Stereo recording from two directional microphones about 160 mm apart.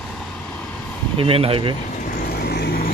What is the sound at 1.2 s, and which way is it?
Speech, 35° right (ahead or behind).